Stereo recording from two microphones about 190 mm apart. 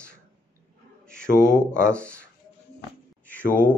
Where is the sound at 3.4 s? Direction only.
45° left (ahead or behind).